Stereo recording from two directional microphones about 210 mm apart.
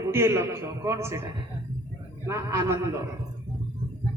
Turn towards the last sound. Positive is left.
turn(degrees=-15)  # may be behind; listen again after turning